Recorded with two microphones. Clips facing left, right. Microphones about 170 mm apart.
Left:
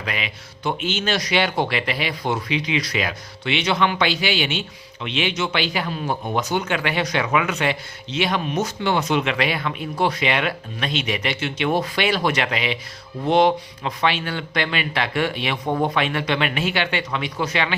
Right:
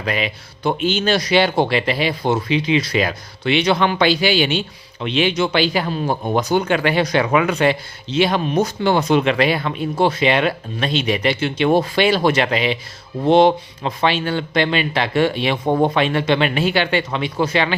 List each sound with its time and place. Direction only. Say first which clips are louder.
0.0 s speech: right 7 dB; 35° right (ahead or behind)